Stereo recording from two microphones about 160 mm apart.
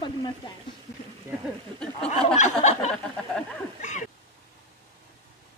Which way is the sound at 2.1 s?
40° left (ahead or behind).